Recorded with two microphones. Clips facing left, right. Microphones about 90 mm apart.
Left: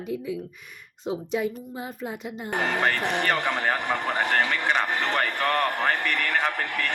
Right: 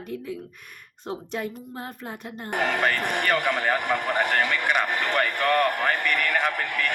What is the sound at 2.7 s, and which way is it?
A man's voice, 15° left (ahead or behind).